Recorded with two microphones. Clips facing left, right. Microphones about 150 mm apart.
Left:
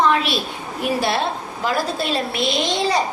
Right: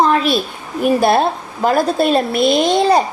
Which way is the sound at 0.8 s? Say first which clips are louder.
Right 8 dB; 50° right (ahead or behind).